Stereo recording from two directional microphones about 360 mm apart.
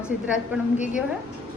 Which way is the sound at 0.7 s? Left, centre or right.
Centre.